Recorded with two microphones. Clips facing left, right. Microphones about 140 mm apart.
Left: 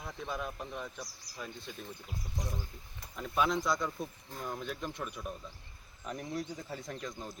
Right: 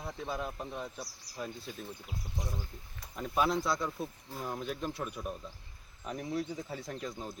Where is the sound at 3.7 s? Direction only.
Centre (ahead or behind).